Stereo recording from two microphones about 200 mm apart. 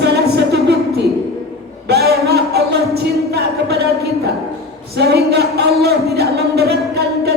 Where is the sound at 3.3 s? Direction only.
50° right (ahead or behind).